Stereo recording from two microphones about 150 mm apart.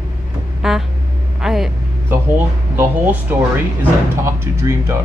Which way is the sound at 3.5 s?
15° right (ahead or behind).